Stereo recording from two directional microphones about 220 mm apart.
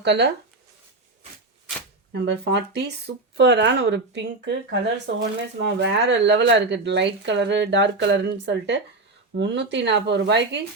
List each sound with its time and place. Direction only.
0.0 s speech: 50° right (ahead or behind)
2.1 s speech: 50° right (ahead or behind)